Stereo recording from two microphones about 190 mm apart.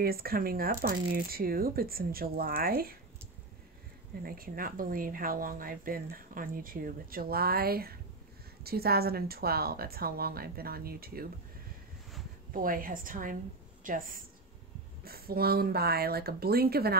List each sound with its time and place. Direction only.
0.0 s speech: 50° right (ahead or behind)
4.2 s speech: 50° right (ahead or behind)
12.5 s speech: 45° right (ahead or behind)